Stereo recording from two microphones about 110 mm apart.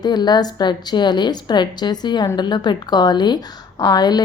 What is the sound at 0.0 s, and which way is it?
A woman's voice, 40° left (ahead or behind).